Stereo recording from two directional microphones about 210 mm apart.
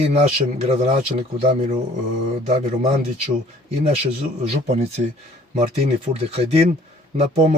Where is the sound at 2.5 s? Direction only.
30° right (ahead or behind).